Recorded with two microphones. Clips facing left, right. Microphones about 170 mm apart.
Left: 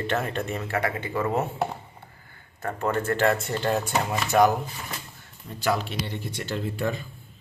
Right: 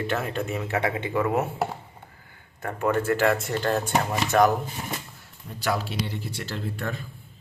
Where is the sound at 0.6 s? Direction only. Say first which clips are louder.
Right 1 dB; 20° right (ahead or behind).